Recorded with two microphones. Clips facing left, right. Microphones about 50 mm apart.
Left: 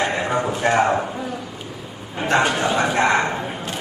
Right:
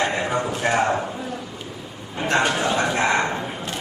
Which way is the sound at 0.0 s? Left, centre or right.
Centre.